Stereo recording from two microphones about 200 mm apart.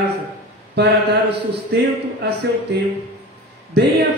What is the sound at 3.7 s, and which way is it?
Speech, 55° right (ahead or behind).